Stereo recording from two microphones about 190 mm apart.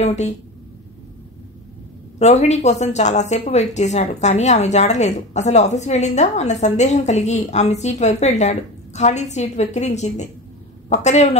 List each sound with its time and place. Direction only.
0.0 s a woman's voice: 35° left (ahead or behind)
2.1 s a woman's voice: 35° left (ahead or behind)